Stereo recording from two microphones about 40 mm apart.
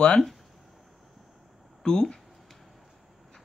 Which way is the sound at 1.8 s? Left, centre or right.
Centre.